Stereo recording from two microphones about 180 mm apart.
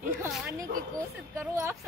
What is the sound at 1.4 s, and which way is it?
Speech, 15° right (ahead or behind).